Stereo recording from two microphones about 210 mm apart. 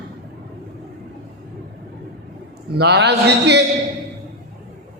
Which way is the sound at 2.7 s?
50° right (ahead or behind).